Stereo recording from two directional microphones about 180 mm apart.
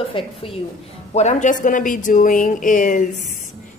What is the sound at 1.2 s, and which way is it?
Speech, 40° left (ahead or behind).